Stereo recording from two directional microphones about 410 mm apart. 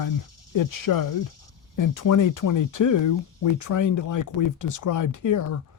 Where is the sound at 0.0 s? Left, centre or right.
Left.